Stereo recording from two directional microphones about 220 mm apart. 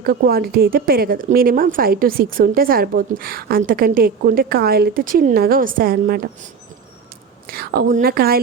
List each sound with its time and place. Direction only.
0.0 s speech: 45° right (ahead or behind)
7.4 s a woman's voice: 40° right (ahead or behind)